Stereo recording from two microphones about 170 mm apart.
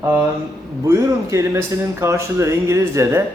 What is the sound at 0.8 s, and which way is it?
Speech, 15° right (ahead or behind).